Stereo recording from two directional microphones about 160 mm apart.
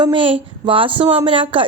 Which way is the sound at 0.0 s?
30° right (ahead or behind).